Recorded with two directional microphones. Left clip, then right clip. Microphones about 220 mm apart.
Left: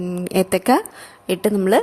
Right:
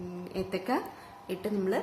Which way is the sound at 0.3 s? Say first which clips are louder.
Left 15 dB; 45° left (ahead or behind).